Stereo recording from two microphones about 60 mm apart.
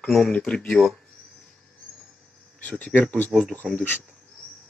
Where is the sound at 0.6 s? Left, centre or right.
Centre.